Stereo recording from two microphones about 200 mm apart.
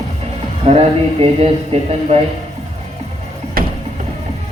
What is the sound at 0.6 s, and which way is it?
Speech, 30° right (ahead or behind).